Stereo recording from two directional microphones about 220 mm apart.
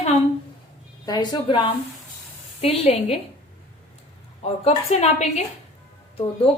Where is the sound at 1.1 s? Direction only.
20° left (ahead or behind).